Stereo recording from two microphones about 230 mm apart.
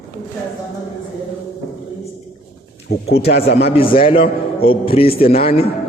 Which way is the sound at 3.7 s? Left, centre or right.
Left.